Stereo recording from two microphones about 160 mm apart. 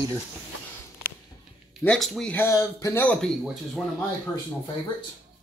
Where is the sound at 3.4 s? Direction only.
Centre (ahead or behind).